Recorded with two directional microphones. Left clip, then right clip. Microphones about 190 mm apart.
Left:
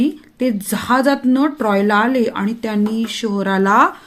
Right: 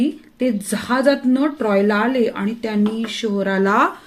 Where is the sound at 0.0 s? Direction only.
40° left (ahead or behind).